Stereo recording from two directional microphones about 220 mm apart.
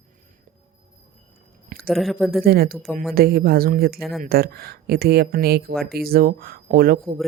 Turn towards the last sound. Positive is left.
turn(degrees=-45)  # may be behind; listen again after turning